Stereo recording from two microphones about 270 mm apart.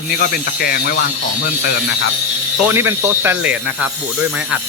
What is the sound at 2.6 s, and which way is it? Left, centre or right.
Speech, centre.